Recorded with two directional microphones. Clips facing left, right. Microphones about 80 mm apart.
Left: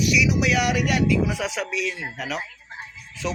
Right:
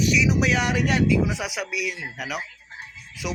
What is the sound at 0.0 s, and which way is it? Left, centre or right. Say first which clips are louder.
Speech: even; right.